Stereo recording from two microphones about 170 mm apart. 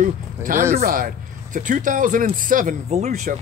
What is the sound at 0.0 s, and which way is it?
A man's voice, 50° right (ahead or behind).